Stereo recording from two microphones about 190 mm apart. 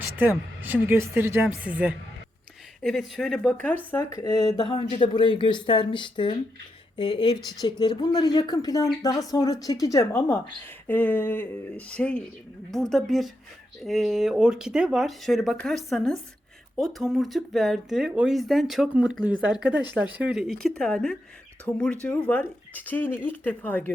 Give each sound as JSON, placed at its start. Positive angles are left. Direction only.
{"t": 0.0, "sound": "speech", "side_deg": -10}
{"t": 3.9, "sound": "speech", "side_deg": 15}